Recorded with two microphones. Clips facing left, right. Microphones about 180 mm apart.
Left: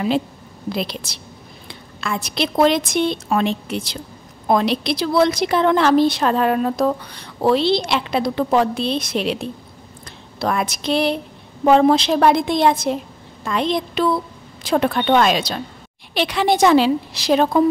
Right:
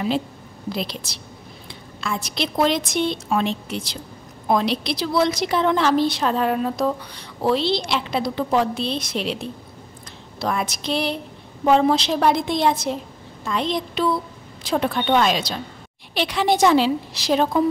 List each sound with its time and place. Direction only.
0.7 s a woman's voice: 60° left (ahead or behind)
10.4 s a woman's voice: 55° left (ahead or behind)